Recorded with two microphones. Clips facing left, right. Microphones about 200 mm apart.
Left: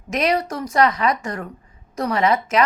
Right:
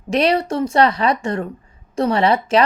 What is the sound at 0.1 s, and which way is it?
A woman's voice, 30° right (ahead or behind).